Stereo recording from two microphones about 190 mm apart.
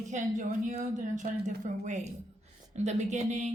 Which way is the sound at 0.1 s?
40° right (ahead or behind).